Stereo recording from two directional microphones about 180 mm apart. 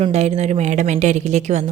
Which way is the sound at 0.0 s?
35° right (ahead or behind).